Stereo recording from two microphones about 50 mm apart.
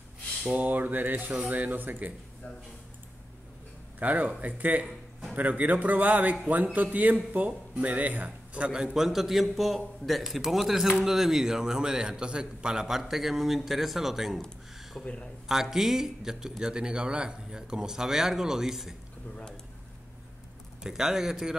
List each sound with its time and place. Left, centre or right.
0.6 s a man's voice: right
4.0 s a man's voice: right; by 14.4 s centre
15.0 s speech: left
15.4 s speech: centre
19.3 s speech: centre
20.8 s speech: centre